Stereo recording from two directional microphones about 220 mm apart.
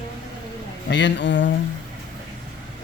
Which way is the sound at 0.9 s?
55° left (ahead or behind).